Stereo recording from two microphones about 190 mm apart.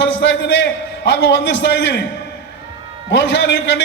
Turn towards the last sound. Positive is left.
turn(degrees=65)  # may be behind; listen again after turning